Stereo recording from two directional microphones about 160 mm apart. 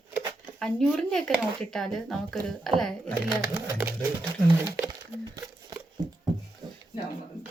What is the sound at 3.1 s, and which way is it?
Speech, 10° right (ahead or behind).